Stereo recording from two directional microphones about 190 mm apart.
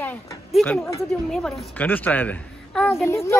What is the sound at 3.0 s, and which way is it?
Speech, 15° left (ahead or behind).